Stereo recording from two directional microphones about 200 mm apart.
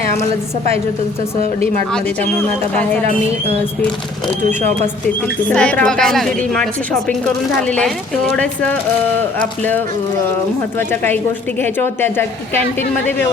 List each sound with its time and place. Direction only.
5.5 s speech: 5° left (ahead or behind)
7.8 s speech: 5° left (ahead or behind)
10.8 s speech: 10° left (ahead or behind)